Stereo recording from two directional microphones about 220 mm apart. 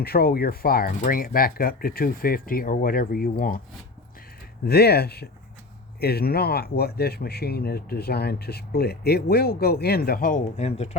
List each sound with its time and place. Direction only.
0.0 s speech: 45° left (ahead or behind)
4.6 s speech: 45° left (ahead or behind); by 10.9 s 30° left (ahead or behind)